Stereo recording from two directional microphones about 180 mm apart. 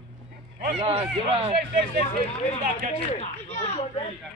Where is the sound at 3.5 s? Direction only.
40° left (ahead or behind).